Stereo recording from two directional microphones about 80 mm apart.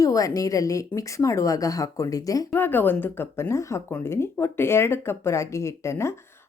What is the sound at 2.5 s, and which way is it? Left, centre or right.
Speech, left.